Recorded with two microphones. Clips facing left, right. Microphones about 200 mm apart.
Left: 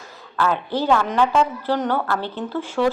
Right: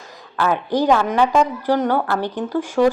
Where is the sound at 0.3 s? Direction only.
10° right (ahead or behind).